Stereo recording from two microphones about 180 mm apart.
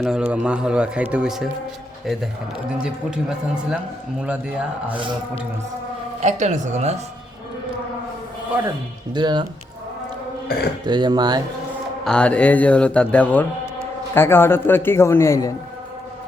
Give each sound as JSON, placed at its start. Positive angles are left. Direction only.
{"t": 0.0, "sound": "a man's voice", "side_deg": -5}
{"t": 6.2, "sound": "speech", "side_deg": -40}
{"t": 9.1, "sound": "speech", "side_deg": -25}
{"t": 10.8, "sound": "speech", "side_deg": -25}
{"t": 12.0, "sound": "speech", "side_deg": 5}